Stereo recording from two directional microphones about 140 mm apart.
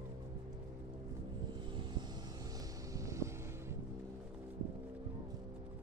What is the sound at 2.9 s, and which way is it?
Vehicle, 20° right (ahead or behind).